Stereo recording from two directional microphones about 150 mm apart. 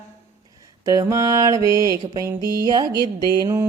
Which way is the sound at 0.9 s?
20° right (ahead or behind).